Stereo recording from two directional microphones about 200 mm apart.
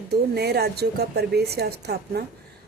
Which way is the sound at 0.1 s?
55° right (ahead or behind).